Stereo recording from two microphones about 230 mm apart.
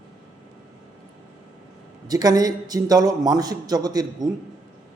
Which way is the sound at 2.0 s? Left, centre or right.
Centre.